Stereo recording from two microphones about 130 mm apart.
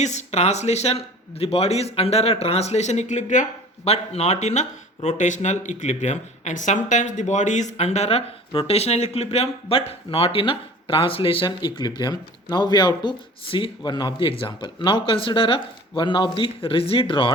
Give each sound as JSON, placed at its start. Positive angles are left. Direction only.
{"t": 0.0, "sound": "speech", "side_deg": 60}
{"t": 3.8, "sound": "speech", "side_deg": 55}